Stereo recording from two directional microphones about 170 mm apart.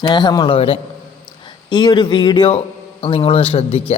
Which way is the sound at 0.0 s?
25° left (ahead or behind).